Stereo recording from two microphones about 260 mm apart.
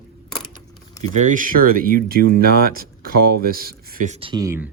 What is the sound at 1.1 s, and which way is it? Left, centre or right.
Speech, right.